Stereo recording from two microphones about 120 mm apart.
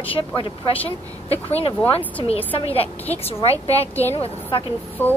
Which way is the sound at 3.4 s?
55° left (ahead or behind).